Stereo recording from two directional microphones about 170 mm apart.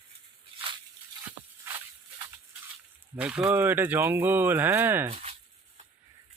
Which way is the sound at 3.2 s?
5° right (ahead or behind).